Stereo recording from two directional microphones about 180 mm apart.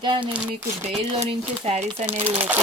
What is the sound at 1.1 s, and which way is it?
Speech, 35° right (ahead or behind).